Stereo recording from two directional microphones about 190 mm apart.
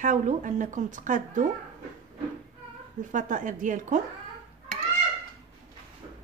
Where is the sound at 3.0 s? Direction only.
40° right (ahead or behind).